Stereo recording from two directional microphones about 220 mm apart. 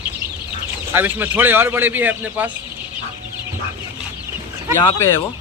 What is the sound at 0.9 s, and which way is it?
A man's voice, 10° right (ahead or behind).